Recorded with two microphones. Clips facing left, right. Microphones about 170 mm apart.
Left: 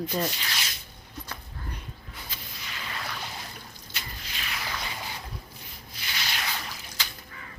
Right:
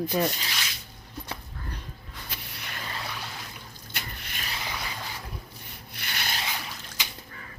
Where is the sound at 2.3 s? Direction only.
65° right (ahead or behind).